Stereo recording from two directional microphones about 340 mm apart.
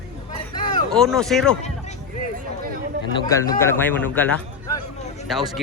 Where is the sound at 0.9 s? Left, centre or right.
Centre.